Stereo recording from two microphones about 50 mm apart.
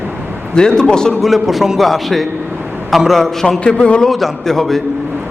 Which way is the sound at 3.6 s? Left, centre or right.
Left.